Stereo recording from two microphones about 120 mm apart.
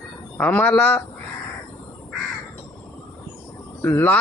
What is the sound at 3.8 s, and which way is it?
Speech, 15° left (ahead or behind).